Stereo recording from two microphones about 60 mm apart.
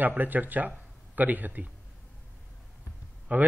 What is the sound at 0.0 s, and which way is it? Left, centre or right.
A man's voice, right.